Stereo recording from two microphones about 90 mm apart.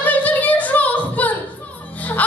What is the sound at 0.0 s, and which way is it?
Singing, 15° left (ahead or behind).